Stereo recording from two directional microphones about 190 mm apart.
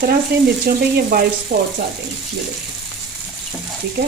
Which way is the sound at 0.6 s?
50° right (ahead or behind).